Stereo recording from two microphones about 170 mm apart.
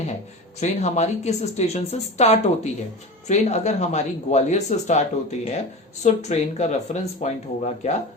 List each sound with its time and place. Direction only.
0.6 s a woman's voice: 40° left (ahead or behind)